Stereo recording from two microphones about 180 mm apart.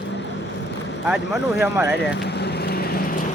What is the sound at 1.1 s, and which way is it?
Speech, 5° right (ahead or behind).